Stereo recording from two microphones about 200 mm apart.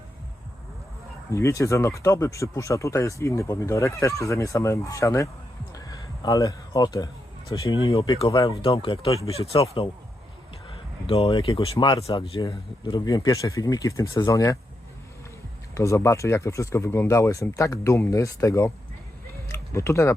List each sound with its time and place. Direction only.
1.3 s speech: 15° left (ahead or behind)
5.7 s a sound: 20° left (ahead or behind)
7.9 s speech: 25° left (ahead or behind)
15.7 s speech: 15° left (ahead or behind)